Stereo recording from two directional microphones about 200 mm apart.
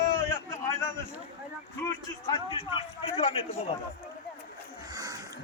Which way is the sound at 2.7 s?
25° left (ahead or behind).